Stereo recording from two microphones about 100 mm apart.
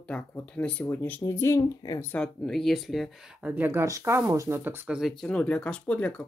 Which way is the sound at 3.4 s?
20° right (ahead or behind).